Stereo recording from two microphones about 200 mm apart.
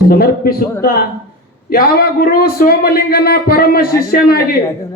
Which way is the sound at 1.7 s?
50° left (ahead or behind).